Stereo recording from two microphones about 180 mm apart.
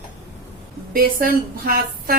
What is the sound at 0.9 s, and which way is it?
A woman's voice, 55° right (ahead or behind).